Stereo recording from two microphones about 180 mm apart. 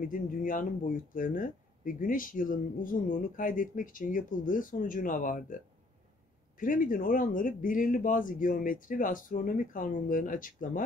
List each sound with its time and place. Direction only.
0.0 s speech: 50° left (ahead or behind)
6.6 s speech: 50° left (ahead or behind)